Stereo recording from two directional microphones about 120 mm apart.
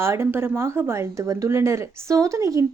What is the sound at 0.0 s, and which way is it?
Speech, 20° right (ahead or behind).